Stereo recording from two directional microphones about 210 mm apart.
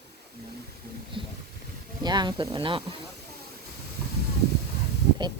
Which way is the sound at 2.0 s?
20° right (ahead or behind).